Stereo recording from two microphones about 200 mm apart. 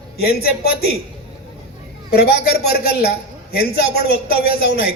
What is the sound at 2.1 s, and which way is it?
Speech, 50° left (ahead or behind).